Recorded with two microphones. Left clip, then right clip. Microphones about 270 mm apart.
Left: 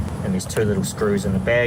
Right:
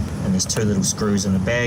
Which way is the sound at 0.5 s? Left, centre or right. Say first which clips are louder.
Left 1 dB; centre.